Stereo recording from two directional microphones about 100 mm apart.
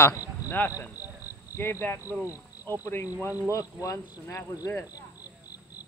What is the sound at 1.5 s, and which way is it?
Speech, 25° left (ahead or behind).